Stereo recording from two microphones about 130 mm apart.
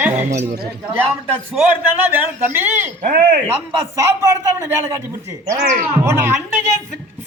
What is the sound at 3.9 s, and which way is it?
Speech, 25° right (ahead or behind).